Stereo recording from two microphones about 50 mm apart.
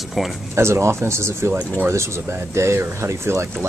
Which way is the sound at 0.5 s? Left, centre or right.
Right.